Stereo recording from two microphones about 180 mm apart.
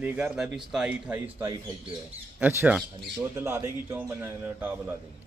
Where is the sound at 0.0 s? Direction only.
5° right (ahead or behind).